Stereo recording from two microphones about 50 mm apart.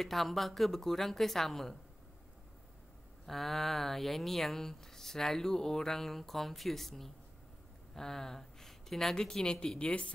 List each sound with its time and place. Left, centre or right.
0.0 s speech: centre
3.3 s speech: centre; by 10.1 s left